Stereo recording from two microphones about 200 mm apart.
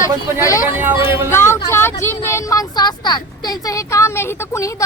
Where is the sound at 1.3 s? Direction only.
15° left (ahead or behind).